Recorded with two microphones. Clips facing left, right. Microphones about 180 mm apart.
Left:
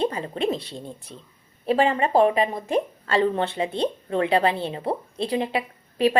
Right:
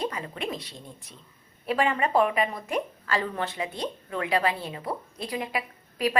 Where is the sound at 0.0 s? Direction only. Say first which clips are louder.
Left 7 dB; 30° left (ahead or behind).